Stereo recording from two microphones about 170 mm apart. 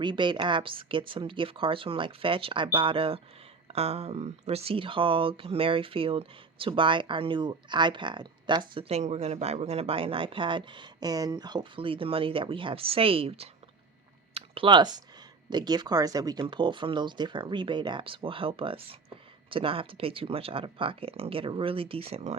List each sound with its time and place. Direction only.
0.0 s speech: 30° right (ahead or behind)